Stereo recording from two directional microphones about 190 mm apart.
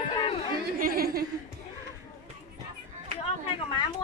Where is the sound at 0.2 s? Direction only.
30° left (ahead or behind).